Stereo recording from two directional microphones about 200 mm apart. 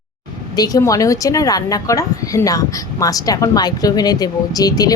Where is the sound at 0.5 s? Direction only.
20° left (ahead or behind).